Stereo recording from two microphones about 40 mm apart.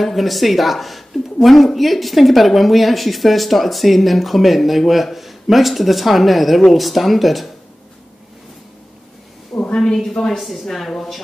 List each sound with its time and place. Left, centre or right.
0.0 s speech: centre
9.8 s a woman's voice: centre